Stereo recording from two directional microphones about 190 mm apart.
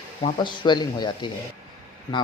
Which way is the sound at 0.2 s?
30° left (ahead or behind).